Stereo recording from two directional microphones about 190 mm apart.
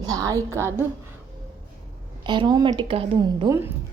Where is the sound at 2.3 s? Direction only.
25° right (ahead or behind).